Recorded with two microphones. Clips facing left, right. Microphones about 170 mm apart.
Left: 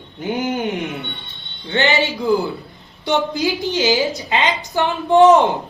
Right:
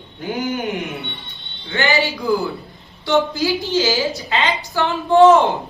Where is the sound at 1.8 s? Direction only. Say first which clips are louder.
Left 1 dB; 20° left (ahead or behind).